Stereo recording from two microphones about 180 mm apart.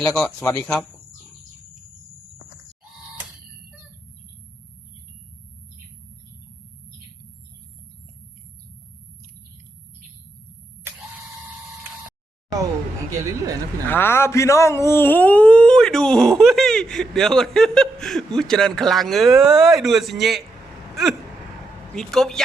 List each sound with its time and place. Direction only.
0.0 s speech: 5° left (ahead or behind)
12.5 s a sound: 20° right (ahead or behind)
13.8 s speech: 10° left (ahead or behind)
20.9 s vehicle: centre (ahead or behind)
21.9 s speech: 5° left (ahead or behind)